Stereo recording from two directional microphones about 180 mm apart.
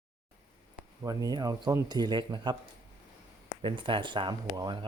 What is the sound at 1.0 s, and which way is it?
Speech, 20° right (ahead or behind).